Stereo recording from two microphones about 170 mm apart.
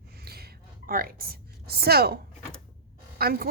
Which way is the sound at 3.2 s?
65° right (ahead or behind).